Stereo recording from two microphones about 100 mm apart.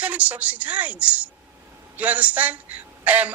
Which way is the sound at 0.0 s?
15° right (ahead or behind).